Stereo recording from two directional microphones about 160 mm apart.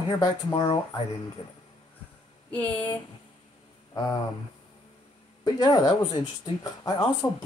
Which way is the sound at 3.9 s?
25° left (ahead or behind).